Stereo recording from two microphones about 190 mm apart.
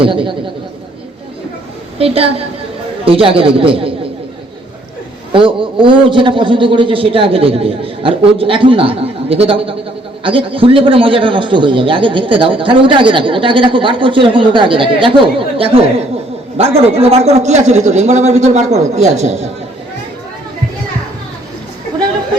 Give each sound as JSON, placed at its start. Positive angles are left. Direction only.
{"t": 0.0, "sound": "a man's voice", "side_deg": -25}
{"t": 2.0, "sound": "a man's voice", "side_deg": -30}
{"t": 5.3, "sound": "a man's voice", "side_deg": -25}